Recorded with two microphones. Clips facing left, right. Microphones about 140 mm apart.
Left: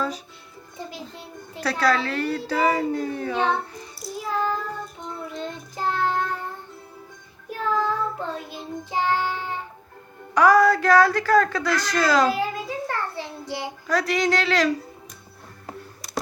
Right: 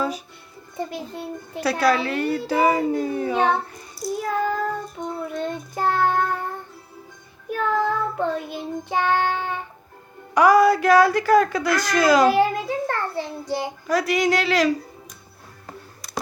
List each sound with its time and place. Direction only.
0.8 s child singing: 55° right (ahead or behind)
1.8 s speech: 15° right (ahead or behind)
4.2 s child singing: 55° right (ahead or behind)
7.5 s child singing: 60° right (ahead or behind)
10.3 s speech: 10° right (ahead or behind)
12.3 s a child's voice: 65° right (ahead or behind)
13.4 s a child's voice: 45° right (ahead or behind)
13.8 s speech: 10° right (ahead or behind)